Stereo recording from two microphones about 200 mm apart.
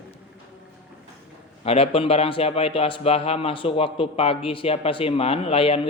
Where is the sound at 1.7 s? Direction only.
30° left (ahead or behind).